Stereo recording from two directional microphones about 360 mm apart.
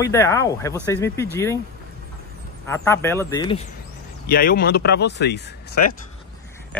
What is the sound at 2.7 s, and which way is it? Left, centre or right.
Speech, centre.